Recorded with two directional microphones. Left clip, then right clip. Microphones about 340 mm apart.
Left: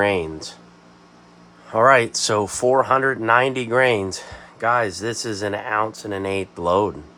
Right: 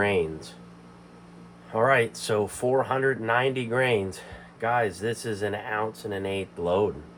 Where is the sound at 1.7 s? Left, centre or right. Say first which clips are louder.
Left 7 dB; left.